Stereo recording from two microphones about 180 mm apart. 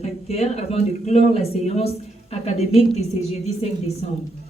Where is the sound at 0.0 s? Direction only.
35° left (ahead or behind).